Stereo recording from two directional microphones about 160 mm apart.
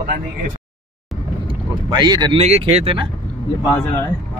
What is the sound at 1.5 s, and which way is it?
Boat, 25° right (ahead or behind).